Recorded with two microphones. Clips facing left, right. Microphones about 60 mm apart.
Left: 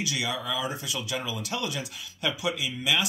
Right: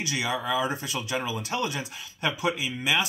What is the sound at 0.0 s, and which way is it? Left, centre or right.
Speech, right.